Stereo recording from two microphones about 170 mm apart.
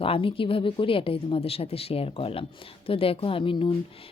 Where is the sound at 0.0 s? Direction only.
30° left (ahead or behind).